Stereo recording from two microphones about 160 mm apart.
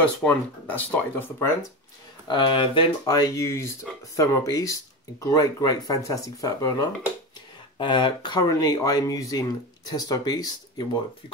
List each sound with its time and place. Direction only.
0.0 s speech: 10° left (ahead or behind)
2.2 s speech: 30° left (ahead or behind)